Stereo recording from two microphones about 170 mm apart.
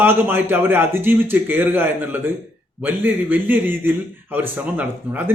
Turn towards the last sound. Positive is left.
turn(degrees=-10)  # may be behind; listen again after turning